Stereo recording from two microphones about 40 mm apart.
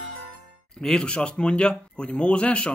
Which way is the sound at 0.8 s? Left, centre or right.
Left.